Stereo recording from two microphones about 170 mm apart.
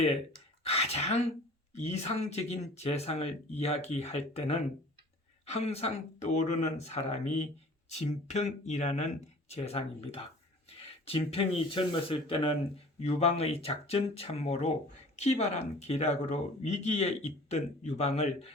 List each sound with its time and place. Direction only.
0.7 s speech: 35° left (ahead or behind)